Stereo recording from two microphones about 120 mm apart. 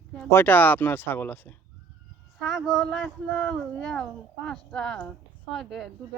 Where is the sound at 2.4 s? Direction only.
Centre (ahead or behind).